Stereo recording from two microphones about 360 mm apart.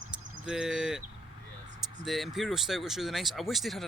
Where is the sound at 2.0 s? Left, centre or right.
Centre.